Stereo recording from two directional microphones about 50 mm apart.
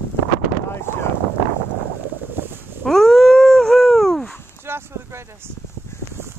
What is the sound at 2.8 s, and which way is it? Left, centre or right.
Dog, centre.